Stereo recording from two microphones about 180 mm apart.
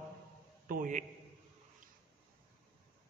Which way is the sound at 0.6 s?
50° right (ahead or behind).